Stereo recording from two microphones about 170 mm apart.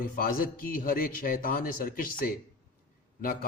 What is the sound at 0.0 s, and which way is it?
A man's voice, 55° left (ahead or behind).